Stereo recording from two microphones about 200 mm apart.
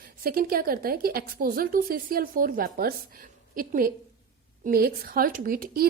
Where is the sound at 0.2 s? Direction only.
45° right (ahead or behind).